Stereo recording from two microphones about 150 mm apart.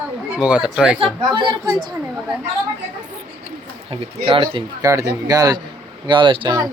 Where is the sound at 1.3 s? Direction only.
30° right (ahead or behind).